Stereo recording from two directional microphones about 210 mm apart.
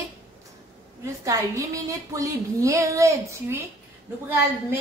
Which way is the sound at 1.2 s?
15° right (ahead or behind).